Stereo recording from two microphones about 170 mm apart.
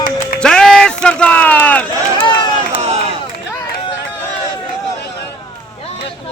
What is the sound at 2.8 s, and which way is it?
Crowd, 40° right (ahead or behind).